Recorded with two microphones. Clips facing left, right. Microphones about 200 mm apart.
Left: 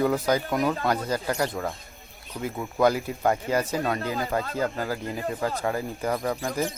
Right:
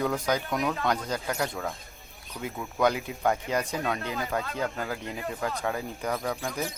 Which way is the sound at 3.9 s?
45° left (ahead or behind).